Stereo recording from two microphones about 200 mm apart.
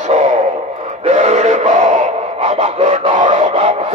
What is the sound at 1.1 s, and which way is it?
Male singing, 35° right (ahead or behind).